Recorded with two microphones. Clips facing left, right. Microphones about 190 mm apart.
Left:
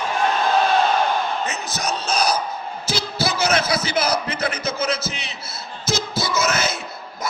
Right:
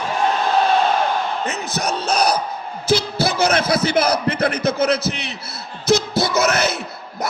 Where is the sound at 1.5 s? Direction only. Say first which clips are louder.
Right 3 dB; 55° right (ahead or behind).